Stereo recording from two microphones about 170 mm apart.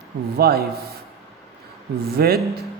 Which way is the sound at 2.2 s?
65° right (ahead or behind).